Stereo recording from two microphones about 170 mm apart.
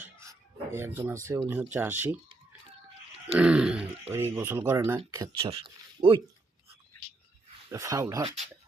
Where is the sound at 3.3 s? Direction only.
5° right (ahead or behind).